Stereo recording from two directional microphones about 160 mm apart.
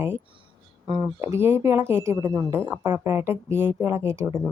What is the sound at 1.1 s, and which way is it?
Speech, 15° right (ahead or behind).